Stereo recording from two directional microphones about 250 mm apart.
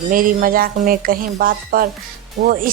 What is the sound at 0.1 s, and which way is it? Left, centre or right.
A woman's voice, right.